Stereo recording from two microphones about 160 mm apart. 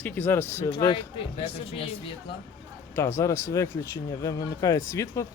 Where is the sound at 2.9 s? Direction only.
20° left (ahead or behind).